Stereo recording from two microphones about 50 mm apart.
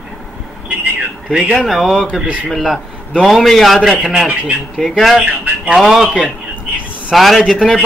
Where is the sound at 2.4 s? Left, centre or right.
Centre.